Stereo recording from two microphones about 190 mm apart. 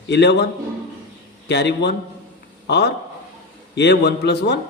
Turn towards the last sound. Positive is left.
turn(degrees=60)  # may be behind; listen again after turning